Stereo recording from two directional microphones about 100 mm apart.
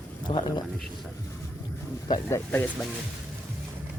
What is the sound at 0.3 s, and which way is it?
Speech, 45° left (ahead or behind).